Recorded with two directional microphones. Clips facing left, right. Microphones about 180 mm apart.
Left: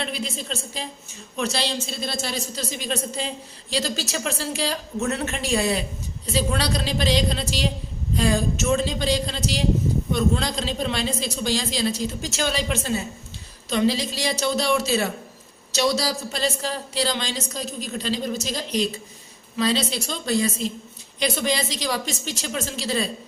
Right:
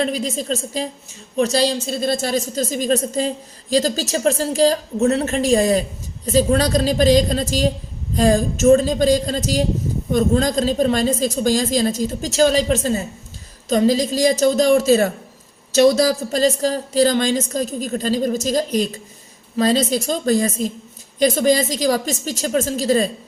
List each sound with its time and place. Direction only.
0.0 s a woman's voice: 40° right (ahead or behind)